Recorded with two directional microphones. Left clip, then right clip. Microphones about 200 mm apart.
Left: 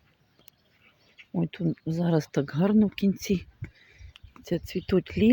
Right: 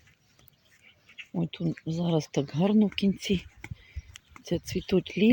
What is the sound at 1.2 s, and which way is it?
Insect, 55° left (ahead or behind).